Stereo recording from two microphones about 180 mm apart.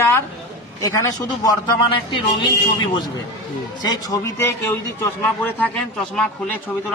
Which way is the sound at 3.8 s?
20° left (ahead or behind).